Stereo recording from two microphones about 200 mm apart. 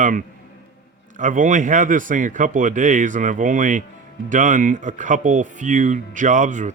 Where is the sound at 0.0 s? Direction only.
40° right (ahead or behind).